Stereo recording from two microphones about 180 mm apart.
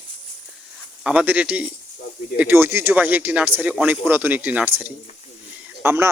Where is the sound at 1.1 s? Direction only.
10° right (ahead or behind).